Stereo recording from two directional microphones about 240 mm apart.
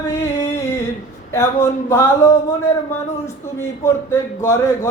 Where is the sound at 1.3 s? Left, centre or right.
Centre.